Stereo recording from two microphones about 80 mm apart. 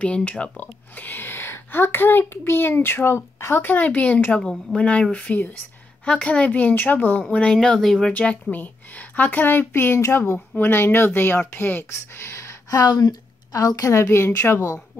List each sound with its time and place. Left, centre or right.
0.0 s a child's voice: centre
8.1 s a child's voice: centre; by 14.8 s left